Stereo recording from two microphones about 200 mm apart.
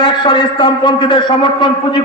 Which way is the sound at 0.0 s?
20° left (ahead or behind).